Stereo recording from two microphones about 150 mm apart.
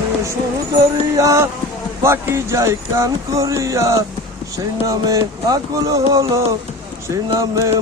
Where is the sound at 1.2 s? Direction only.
20° right (ahead or behind).